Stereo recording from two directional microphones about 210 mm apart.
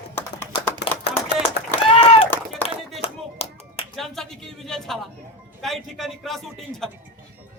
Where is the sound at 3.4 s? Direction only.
30° left (ahead or behind).